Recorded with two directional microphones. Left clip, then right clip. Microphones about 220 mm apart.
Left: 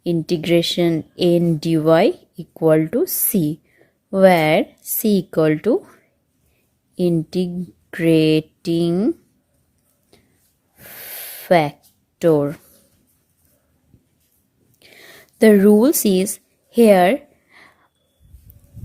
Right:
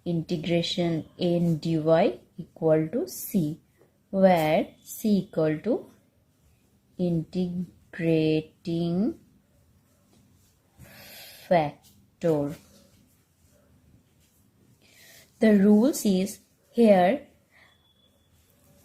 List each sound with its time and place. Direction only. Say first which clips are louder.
0.0 s speech: left 10 dB; 35° left (ahead or behind)
6.9 s speech: left 10 dB; 40° left (ahead or behind)
11.4 s speech: left 8 dB; 40° left (ahead or behind)
15.4 s a woman's voice: left 9 dB; 40° left (ahead or behind)